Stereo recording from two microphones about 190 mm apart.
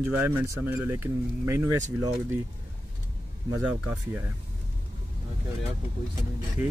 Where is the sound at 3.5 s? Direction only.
10° right (ahead or behind).